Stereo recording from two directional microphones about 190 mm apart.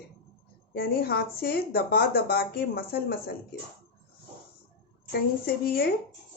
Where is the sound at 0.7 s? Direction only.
55° left (ahead or behind).